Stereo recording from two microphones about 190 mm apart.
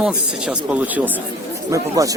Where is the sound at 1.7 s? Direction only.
15° right (ahead or behind).